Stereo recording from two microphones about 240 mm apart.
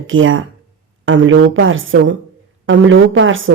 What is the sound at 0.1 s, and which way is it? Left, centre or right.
A woman's voice, right.